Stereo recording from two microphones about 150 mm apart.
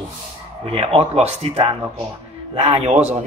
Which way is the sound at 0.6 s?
40° right (ahead or behind).